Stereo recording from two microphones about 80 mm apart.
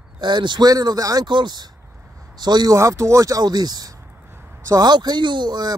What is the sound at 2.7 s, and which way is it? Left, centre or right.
Speech, right.